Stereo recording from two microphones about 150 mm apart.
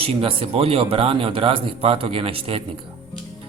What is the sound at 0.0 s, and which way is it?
Speech, 40° right (ahead or behind).